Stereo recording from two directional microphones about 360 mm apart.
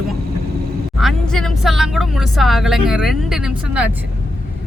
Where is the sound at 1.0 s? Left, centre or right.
Centre.